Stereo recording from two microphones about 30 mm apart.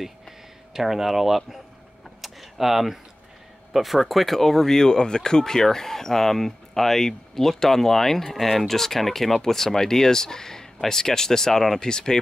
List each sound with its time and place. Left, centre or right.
0.7 s speech: centre
2.2 s a sound: centre
3.7 s speech: centre; by 5.4 s left
5.4 s speech: centre
11.9 s speech: left